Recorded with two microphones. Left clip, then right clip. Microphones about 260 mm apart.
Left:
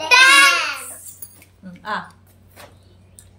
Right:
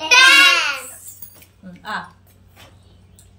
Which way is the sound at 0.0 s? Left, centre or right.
Centre.